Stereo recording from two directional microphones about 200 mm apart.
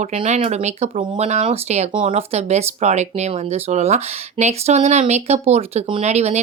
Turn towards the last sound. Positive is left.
turn(degrees=-35)  # may be behind; listen again after turning